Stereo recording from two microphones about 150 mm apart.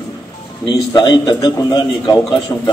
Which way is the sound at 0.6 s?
30° left (ahead or behind).